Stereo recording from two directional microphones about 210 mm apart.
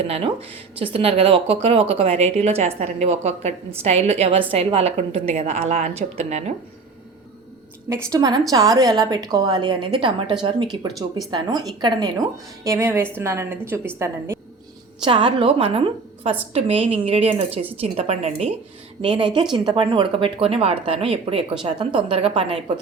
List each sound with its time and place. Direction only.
0.1 s a woman's voice: 30° right (ahead or behind)
7.9 s a woman's voice: 15° right (ahead or behind)